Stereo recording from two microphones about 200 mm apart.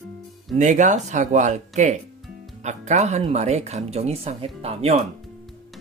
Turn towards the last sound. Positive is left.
turn(degrees=-30)  # may be behind; listen again after turning